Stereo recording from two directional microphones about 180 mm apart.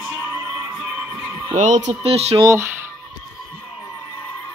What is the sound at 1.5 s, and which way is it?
Speech, 45° right (ahead or behind).